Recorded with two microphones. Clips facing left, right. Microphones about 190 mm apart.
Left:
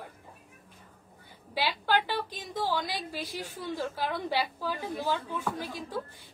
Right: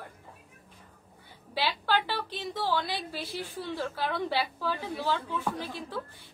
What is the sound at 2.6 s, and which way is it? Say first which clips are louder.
A woman's voice: even; 15° left (ahead or behind).